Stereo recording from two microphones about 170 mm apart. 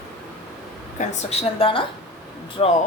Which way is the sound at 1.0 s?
40° left (ahead or behind).